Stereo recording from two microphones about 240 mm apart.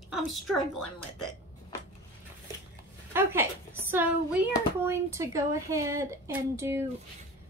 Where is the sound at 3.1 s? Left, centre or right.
Centre.